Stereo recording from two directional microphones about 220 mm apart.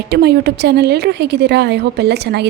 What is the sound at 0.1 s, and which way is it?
A woman's voice, 50° right (ahead or behind).